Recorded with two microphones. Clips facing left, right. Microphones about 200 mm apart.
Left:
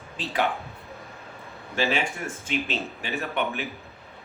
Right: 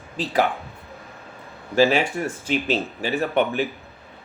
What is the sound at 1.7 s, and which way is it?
Speech, 40° right (ahead or behind).